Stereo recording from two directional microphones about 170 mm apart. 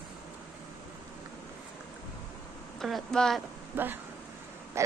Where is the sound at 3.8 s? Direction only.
10° right (ahead or behind).